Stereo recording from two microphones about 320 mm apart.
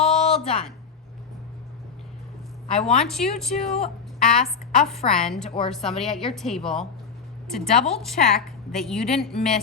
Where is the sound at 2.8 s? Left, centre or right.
Centre.